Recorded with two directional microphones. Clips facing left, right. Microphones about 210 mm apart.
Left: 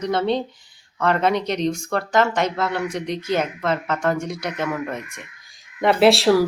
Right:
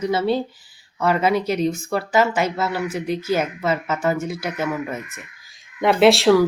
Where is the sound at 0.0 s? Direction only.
5° right (ahead or behind).